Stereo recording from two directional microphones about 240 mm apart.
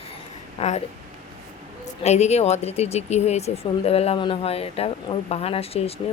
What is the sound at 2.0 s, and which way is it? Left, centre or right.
Speech, left.